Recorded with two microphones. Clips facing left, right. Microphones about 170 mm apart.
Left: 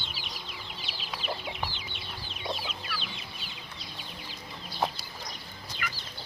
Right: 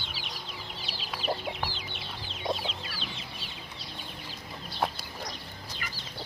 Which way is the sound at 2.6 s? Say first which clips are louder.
Right 1 dB; 30° right (ahead or behind).